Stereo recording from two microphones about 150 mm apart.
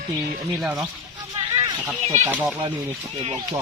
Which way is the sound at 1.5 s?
30° right (ahead or behind).